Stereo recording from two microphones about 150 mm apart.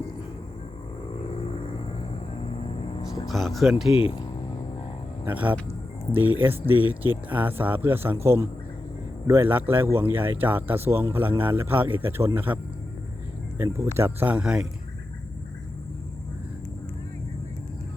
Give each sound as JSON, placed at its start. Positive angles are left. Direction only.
{"t": 2.4, "sound": "music", "side_deg": 40}
{"t": 3.2, "sound": "speech", "side_deg": 0}
{"t": 3.9, "sound": "speech", "side_deg": 35}
{"t": 5.2, "sound": "speech", "side_deg": -10}
{"t": 13.7, "sound": "speech", "side_deg": -20}